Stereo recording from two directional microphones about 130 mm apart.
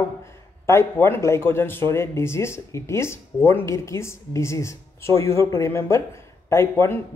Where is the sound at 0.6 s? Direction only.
20° left (ahead or behind).